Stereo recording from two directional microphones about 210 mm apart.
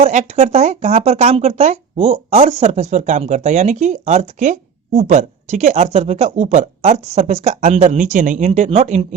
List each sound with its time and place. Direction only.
0.0 s speech: 35° right (ahead or behind)